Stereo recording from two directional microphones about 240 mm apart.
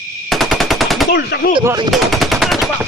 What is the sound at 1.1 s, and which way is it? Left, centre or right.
Speech, left.